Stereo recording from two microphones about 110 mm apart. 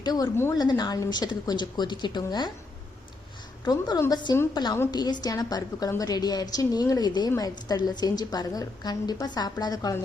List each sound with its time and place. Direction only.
0.0 s a woman's voice: 35° left (ahead or behind)
3.6 s a woman's voice: 40° left (ahead or behind)